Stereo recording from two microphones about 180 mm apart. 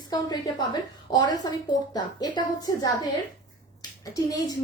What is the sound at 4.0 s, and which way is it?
Speech, 20° left (ahead or behind).